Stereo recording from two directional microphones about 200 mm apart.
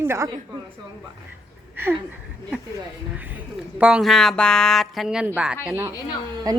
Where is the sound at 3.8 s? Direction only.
Centre (ahead or behind).